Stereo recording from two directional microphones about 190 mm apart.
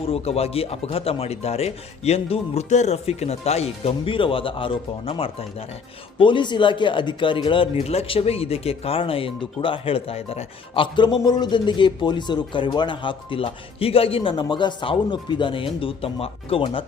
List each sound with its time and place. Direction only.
0.0 s speech: 30° left (ahead or behind)